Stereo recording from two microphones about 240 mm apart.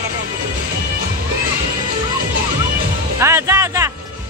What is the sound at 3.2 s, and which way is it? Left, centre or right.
Music, centre.